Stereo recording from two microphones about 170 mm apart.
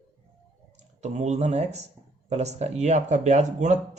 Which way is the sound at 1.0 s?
40° right (ahead or behind).